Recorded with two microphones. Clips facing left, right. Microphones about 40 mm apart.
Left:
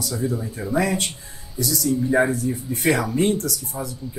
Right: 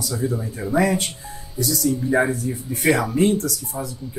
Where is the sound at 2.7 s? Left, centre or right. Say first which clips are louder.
Right 2 dB; centre.